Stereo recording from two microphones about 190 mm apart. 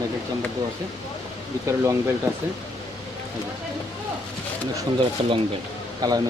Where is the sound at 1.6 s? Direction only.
15° right (ahead or behind).